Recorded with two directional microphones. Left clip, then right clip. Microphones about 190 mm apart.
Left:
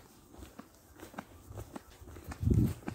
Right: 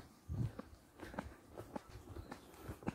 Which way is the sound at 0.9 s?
60° left (ahead or behind).